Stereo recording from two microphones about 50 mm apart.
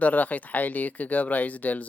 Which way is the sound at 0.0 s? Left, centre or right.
Left.